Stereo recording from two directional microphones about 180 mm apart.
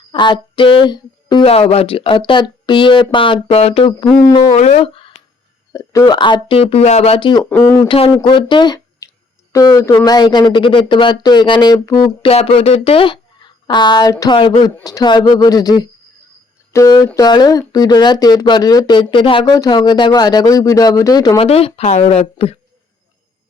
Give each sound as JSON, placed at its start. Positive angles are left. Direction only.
{"t": 0.1, "sound": "speech", "side_deg": 25}
{"t": 4.0, "sound": "speech", "side_deg": 20}
{"t": 4.5, "sound": "speech", "side_deg": 35}
{"t": 5.7, "sound": "speech", "side_deg": 20}
{"t": 12.3, "sound": "speech", "side_deg": 35}
{"t": 21.4, "sound": "speech", "side_deg": 35}